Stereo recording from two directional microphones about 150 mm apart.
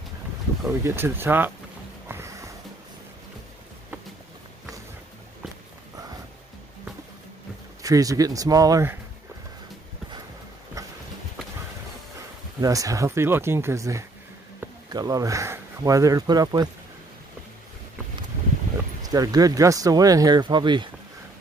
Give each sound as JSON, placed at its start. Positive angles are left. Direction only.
{"t": 0.7, "sound": "speech", "side_deg": -15}
{"t": 2.0, "sound": "music", "side_deg": -20}
{"t": 7.8, "sound": "speech", "side_deg": -25}
{"t": 12.5, "sound": "speech", "side_deg": -25}
{"t": 19.0, "sound": "speech", "side_deg": -25}